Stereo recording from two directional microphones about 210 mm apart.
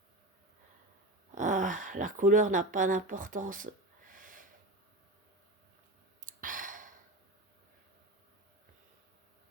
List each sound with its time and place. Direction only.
1.4 s speech: 35° right (ahead or behind)
6.2 s sigh: 40° right (ahead or behind)